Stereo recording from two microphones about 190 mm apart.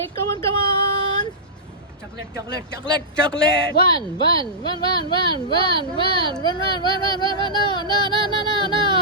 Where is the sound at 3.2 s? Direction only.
5° left (ahead or behind).